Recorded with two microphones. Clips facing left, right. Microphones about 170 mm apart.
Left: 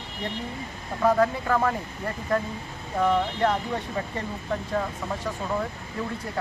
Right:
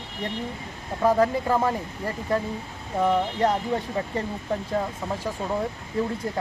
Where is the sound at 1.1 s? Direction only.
20° right (ahead or behind).